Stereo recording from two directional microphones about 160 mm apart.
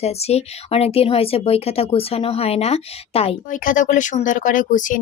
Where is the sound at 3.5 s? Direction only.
55° left (ahead or behind).